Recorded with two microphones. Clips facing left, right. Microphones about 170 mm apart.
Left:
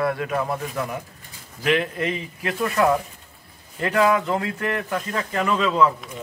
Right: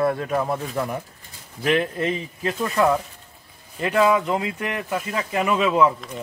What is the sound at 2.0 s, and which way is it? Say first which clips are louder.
Speech: right 2 dB; 25° right (ahead or behind).